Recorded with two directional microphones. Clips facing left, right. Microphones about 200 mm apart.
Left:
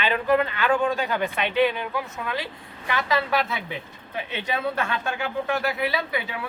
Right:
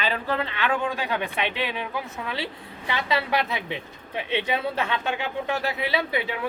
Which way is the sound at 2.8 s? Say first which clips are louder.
Left 1 dB; 25° right (ahead or behind).